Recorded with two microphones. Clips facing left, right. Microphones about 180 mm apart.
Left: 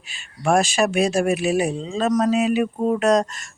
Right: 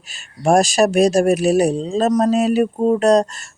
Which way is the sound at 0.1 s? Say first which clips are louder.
Right 4 dB; 40° right (ahead or behind).